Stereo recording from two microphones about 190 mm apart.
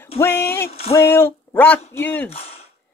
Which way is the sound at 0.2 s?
10° left (ahead or behind).